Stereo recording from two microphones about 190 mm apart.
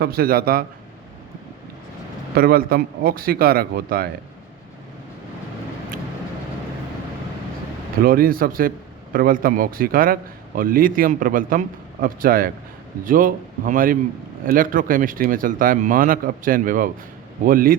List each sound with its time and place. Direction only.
0.0 s a man's voice: 55° right (ahead or behind)
2.3 s a man's voice: 55° right (ahead or behind)
8.0 s a man's voice: 50° right (ahead or behind)